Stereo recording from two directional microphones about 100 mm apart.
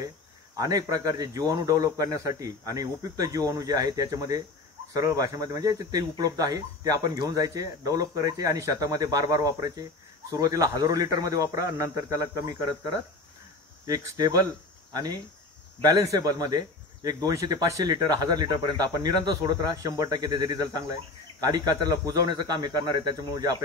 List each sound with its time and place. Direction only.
0.6 s speech: 35° right (ahead or behind)
13.8 s speech: 40° right (ahead or behind)
14.9 s cricket: 40° right (ahead or behind)
15.8 s speech: 35° right (ahead or behind)